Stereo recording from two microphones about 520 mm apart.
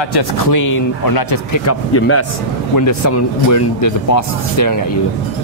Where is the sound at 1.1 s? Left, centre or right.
Left.